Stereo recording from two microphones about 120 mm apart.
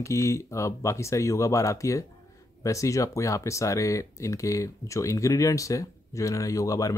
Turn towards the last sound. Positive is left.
turn(degrees=30)  # may be behind; listen again after turning